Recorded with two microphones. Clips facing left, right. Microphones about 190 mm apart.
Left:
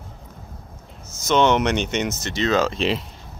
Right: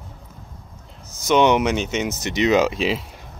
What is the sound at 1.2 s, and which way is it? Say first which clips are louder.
Speech: right 1 dB; 15° right (ahead or behind).